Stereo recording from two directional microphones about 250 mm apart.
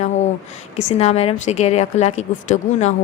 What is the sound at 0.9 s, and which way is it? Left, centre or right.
A woman's voice, left.